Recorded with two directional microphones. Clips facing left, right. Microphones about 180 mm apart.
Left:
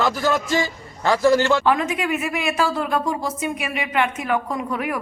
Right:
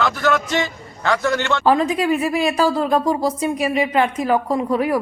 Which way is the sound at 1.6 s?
35° right (ahead or behind).